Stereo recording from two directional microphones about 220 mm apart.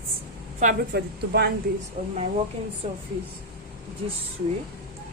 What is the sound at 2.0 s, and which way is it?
A woman's voice, 35° right (ahead or behind).